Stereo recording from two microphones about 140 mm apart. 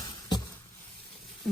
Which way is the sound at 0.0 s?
30° left (ahead or behind).